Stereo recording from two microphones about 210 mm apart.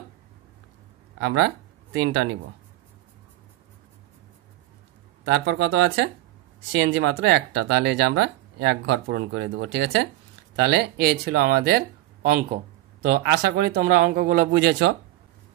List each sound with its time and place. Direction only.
1.2 s speech: 60° right (ahead or behind)
2.0 s speech: 70° right (ahead or behind)
5.3 s speech: 60° right (ahead or behind)